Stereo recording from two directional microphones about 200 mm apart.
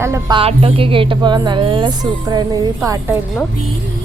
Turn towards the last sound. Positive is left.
turn(degrees=-15)  # may be behind; listen again after turning